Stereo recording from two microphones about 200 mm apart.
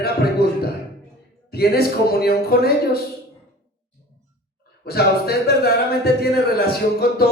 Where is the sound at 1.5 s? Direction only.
50° left (ahead or behind).